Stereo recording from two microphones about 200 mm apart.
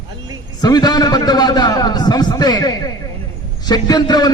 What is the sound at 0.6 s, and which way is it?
A man's voice, 20° left (ahead or behind).